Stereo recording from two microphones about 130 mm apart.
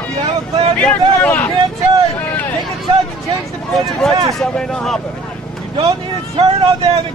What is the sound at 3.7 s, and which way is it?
Speech, centre (ahead or behind).